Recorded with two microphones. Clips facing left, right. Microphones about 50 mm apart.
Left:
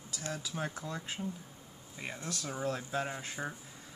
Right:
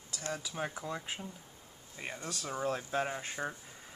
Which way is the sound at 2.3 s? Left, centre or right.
Centre.